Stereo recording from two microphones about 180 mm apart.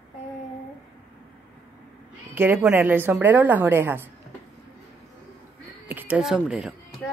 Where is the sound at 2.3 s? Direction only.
10° right (ahead or behind).